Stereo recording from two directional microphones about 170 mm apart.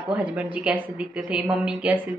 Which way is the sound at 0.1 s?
10° right (ahead or behind).